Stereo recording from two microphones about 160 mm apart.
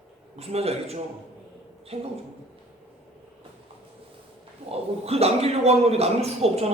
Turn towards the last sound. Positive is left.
turn(degrees=-40)  # may be behind; listen again after turning